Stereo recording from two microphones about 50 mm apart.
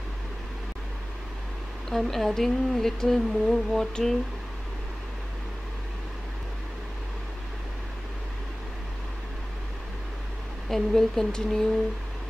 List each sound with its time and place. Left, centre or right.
1.9 s speech: centre
10.7 s speech: centre